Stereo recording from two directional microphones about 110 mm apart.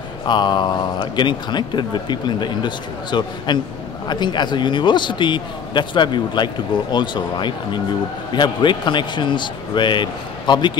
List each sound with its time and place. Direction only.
0.3 s a man's voice: 45° left (ahead or behind)